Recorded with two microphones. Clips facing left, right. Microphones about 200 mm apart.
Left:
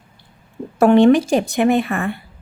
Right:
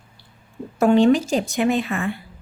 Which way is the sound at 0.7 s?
65° left (ahead or behind).